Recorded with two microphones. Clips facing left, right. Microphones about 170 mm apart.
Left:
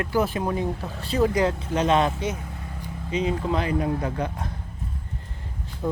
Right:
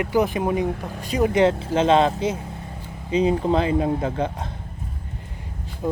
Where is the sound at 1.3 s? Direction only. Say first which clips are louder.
Right 5 dB; 25° right (ahead or behind).